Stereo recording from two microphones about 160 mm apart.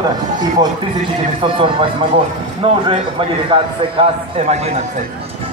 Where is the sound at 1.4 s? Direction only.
35° right (ahead or behind).